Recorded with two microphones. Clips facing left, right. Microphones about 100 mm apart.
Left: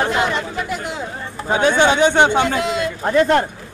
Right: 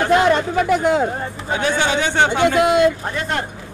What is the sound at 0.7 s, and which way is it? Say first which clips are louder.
Speech: right 10 dB; 55° right (ahead or behind).